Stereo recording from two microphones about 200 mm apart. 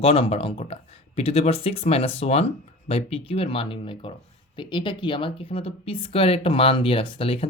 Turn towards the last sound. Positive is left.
turn(degrees=30)  # may be behind; listen again after turning